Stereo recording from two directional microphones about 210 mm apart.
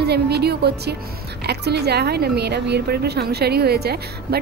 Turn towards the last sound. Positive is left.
turn(degrees=-50)  # may be behind; listen again after turning